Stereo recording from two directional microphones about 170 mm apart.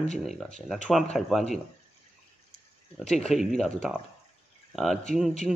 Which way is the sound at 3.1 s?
Centre (ahead or behind).